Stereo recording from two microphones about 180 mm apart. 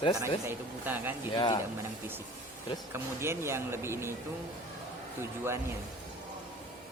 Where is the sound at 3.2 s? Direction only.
15° right (ahead or behind).